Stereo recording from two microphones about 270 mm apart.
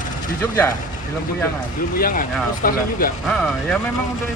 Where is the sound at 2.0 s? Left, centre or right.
Left.